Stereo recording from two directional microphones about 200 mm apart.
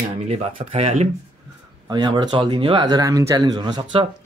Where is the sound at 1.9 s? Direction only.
20° right (ahead or behind).